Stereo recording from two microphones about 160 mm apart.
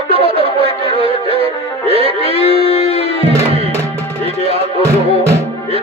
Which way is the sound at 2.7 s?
40° left (ahead or behind).